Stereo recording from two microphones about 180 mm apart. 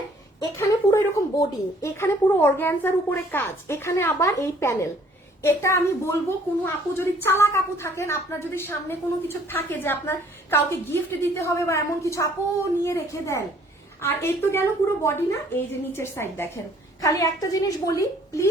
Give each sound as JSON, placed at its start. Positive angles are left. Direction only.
{"t": 0.3, "sound": "a woman's voice", "side_deg": 15}